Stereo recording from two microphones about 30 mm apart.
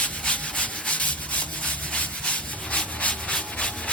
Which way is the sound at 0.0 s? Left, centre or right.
Left.